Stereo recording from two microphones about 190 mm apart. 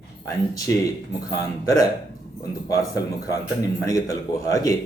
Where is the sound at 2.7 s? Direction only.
15° left (ahead or behind).